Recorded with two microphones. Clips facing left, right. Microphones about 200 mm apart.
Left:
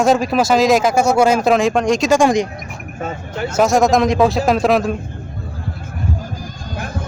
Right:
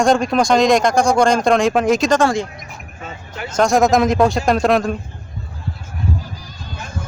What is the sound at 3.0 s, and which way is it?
Speech, 45° left (ahead or behind).